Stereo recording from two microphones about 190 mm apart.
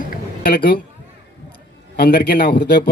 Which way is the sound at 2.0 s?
55° left (ahead or behind).